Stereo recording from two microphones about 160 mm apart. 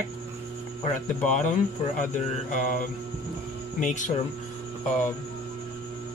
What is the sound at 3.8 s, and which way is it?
Speech, 50° left (ahead or behind).